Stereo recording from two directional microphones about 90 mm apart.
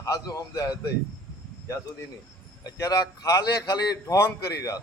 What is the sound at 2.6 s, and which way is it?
A man's voice, 45° left (ahead or behind).